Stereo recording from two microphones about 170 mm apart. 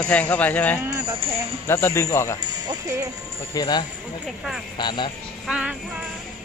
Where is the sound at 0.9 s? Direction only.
20° right (ahead or behind).